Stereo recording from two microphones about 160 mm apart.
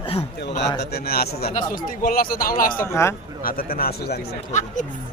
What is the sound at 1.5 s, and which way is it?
Speech, 60° left (ahead or behind).